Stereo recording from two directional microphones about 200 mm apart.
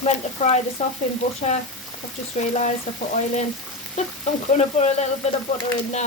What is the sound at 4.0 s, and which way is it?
Speech, 35° left (ahead or behind).